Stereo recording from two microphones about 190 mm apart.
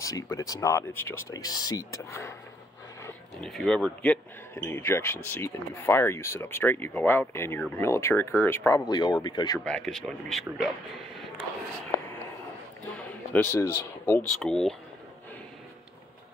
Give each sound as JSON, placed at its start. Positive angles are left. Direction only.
{"t": 0.0, "sound": "speech", "side_deg": 15}
{"t": 3.3, "sound": "speech", "side_deg": 0}
{"t": 9.7, "sound": "speech", "side_deg": 5}
{"t": 12.9, "sound": "speech", "side_deg": 10}